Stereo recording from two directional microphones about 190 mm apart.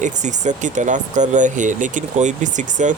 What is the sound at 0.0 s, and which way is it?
Speech, 40° right (ahead or behind).